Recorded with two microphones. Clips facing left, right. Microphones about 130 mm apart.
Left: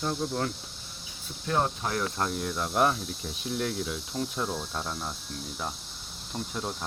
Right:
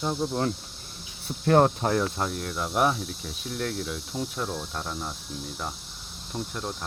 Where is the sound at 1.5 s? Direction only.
60° right (ahead or behind).